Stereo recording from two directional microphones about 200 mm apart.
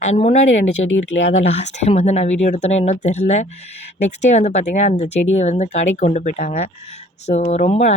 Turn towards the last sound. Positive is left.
turn(degrees=35)  # may be behind; listen again after turning